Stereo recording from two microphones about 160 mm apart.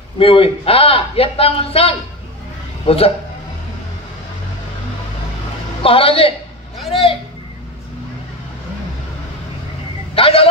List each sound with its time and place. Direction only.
0.2 s a man's voice: 35° left (ahead or behind)
5.8 s a man's voice: 35° left (ahead or behind)
10.1 s a man's voice: 35° left (ahead or behind)